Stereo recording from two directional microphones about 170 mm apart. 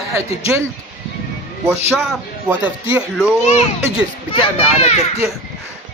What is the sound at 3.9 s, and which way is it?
Speech, 35° left (ahead or behind).